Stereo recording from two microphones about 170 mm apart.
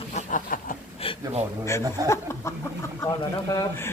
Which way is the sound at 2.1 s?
15° left (ahead or behind).